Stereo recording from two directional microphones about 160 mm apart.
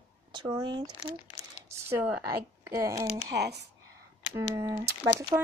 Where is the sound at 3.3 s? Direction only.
90° right.